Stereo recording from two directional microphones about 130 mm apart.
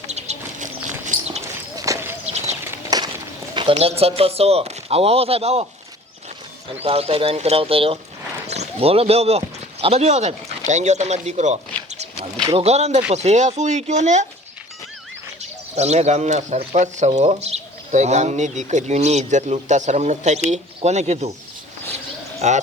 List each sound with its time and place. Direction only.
0.1 s bird: 60° right (ahead or behind)
1.7 s run: 25° right (ahead or behind)
2.2 s bird: 60° right (ahead or behind)
2.9 s walk: 30° right (ahead or behind)
3.5 s speech: 40° right (ahead or behind)
6.8 s speech: 50° right (ahead or behind)
8.4 s speech: 60° right (ahead or behind)
15.4 s speech: 55° right (ahead or behind)
22.4 s speech: 60° right (ahead or behind)